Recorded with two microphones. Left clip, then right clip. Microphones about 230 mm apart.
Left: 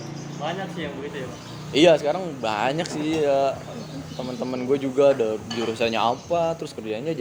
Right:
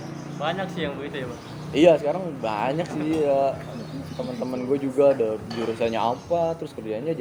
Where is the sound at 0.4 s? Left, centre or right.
Right.